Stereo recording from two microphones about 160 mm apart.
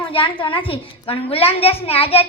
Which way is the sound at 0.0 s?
35° left (ahead or behind).